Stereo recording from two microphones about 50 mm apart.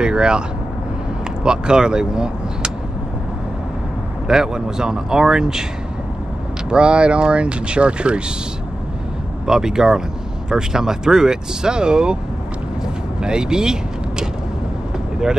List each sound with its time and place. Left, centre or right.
0.0 s vehicle: centre
1.4 s speech: centre
4.3 s speech: centre
6.7 s speech: right
9.5 s speech: centre
12.8 s vehicle: centre